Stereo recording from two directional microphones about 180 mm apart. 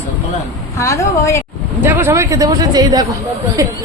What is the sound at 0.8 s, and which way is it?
Speech, 15° left (ahead or behind).